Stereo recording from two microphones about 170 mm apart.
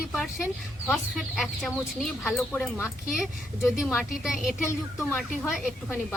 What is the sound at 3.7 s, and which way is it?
Speech, centre (ahead or behind).